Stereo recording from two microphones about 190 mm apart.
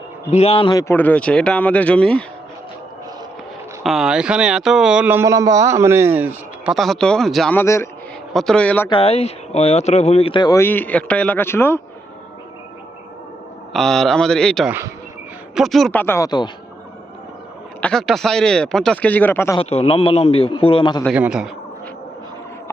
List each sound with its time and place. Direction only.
0.3 s speech: 35° left (ahead or behind); by 2.2 s 5° left (ahead or behind)
3.8 s a man's voice: 5° right (ahead or behind)
6.7 s speech: centre (ahead or behind)
7.6 s speech: 15° left (ahead or behind)
8.3 s speech: centre (ahead or behind)
8.9 s speech: 30° left (ahead or behind); by 11.8 s 10° left (ahead or behind)
13.7 s speech: centre (ahead or behind)
14.7 s a man's voice: 15° right (ahead or behind)
15.5 s speech: centre (ahead or behind); by 16.5 s 20° left (ahead or behind)
17.7 s speech: 5° left (ahead or behind)
19.5 s speech: 30° left (ahead or behind)
21.0 s speech: 5° right (ahead or behind)